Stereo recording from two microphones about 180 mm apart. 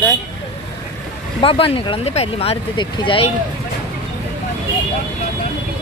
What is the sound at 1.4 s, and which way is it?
Speech, 30° left (ahead or behind).